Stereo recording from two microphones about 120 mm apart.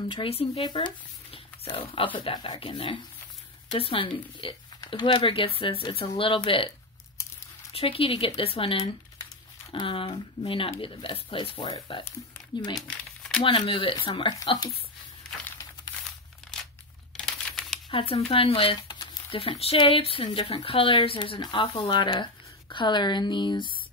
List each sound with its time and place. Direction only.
0.1 s speech: 50° left (ahead or behind)
0.7 s speech: 45° left (ahead or behind)
7.7 s speech: 50° left (ahead or behind)
13.4 s speech: 40° left (ahead or behind)
17.3 s a sound: 5° left (ahead or behind)
17.9 s speech: 55° left (ahead or behind)